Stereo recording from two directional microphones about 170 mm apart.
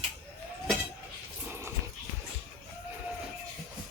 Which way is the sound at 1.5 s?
15° right (ahead or behind).